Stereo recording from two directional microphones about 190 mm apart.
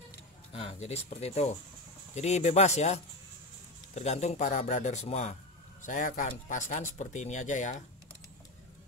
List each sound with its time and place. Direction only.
0.5 s speech: 30° left (ahead or behind)